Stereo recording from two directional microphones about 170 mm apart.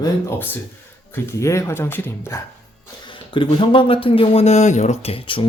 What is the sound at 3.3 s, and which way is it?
Speech, 30° left (ahead or behind).